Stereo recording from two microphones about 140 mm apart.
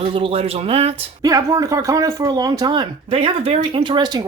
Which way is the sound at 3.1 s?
45° right (ahead or behind).